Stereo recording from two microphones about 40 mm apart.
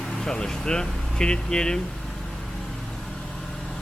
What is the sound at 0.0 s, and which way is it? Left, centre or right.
A man's voice, centre.